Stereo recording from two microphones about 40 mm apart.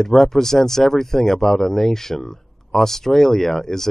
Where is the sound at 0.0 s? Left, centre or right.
Centre.